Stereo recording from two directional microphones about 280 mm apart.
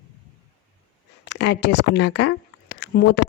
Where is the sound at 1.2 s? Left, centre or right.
Left.